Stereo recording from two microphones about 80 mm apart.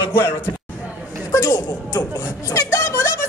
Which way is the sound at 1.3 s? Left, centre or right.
Left.